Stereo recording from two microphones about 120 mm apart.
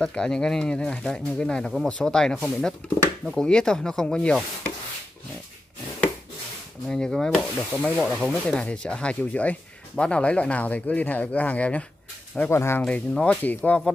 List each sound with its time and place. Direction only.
0.0 s speech: 5° left (ahead or behind)
6.9 s speech: 5° left (ahead or behind); by 12.8 s 20° left (ahead or behind)
12.8 s speech: 10° left (ahead or behind)